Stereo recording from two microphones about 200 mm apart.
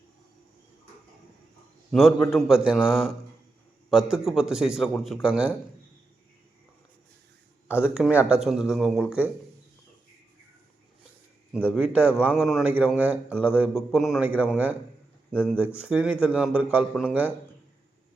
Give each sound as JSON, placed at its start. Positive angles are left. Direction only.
{"t": 1.9, "sound": "speech", "side_deg": 0}
{"t": 7.8, "sound": "speech", "side_deg": -5}
{"t": 11.5, "sound": "speech", "side_deg": -5}